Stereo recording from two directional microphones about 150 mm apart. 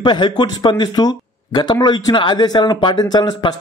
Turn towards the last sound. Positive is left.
turn(degrees=30)  # may be behind; listen again after turning